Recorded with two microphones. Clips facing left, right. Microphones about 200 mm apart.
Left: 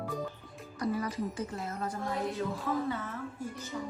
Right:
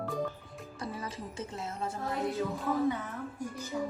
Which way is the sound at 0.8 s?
25° right (ahead or behind).